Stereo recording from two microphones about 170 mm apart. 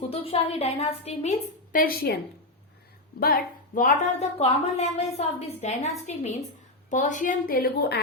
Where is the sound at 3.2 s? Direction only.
55° left (ahead or behind).